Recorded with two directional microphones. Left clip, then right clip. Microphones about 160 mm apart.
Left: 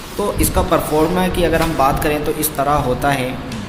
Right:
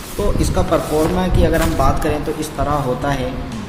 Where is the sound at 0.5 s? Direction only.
10° left (ahead or behind).